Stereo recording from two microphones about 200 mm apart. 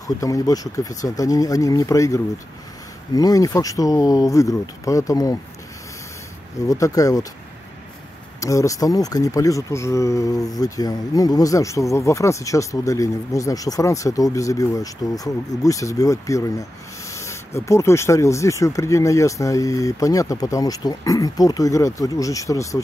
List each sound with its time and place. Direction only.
0.0 s speech: 15° left (ahead or behind)
6.7 s speech: 15° left (ahead or behind)
8.4 s speech: 15° left (ahead or behind)